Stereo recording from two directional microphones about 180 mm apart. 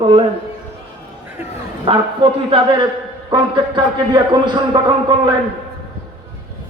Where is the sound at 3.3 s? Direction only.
25° right (ahead or behind).